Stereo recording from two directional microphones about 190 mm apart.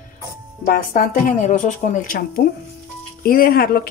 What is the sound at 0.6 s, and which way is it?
A woman's voice, 50° left (ahead or behind).